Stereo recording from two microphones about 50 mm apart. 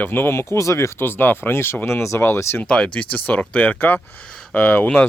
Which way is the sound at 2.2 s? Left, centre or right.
Left.